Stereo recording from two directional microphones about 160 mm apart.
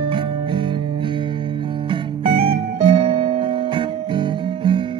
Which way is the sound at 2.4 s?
35° right (ahead or behind).